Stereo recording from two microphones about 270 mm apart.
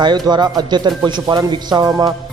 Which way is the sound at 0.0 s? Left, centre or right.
Centre.